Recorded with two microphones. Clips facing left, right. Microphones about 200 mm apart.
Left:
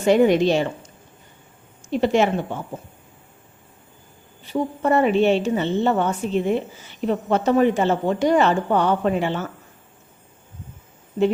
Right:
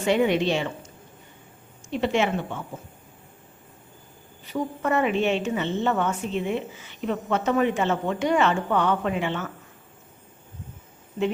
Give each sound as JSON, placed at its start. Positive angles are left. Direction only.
{"t": 0.0, "sound": "a woman's voice", "side_deg": 40}
{"t": 1.9, "sound": "a woman's voice", "side_deg": 40}
{"t": 4.4, "sound": "a woman's voice", "side_deg": 30}